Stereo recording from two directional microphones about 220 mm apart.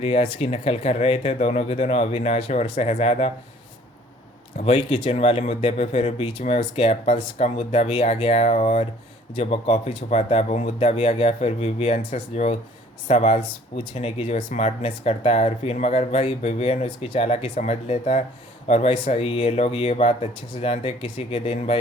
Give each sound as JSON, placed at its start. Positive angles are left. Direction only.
{"t": 0.0, "sound": "speech", "side_deg": 25}
{"t": 4.5, "sound": "speech", "side_deg": 30}